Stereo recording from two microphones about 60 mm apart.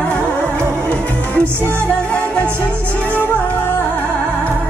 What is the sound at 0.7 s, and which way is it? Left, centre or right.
Music, centre.